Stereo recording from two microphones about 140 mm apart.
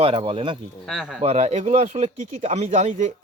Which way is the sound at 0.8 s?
Centre (ahead or behind).